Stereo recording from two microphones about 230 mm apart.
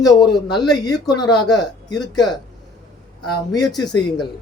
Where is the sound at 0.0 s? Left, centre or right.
Centre.